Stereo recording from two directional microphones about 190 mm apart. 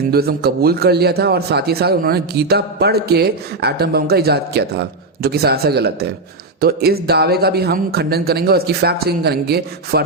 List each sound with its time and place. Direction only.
0.1 s a man's voice: 55° right (ahead or behind)